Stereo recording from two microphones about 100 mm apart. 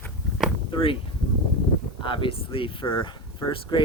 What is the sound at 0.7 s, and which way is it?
Speech, 60° left (ahead or behind).